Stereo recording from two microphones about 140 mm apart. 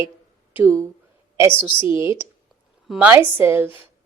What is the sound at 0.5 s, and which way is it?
Speech, 15° right (ahead or behind).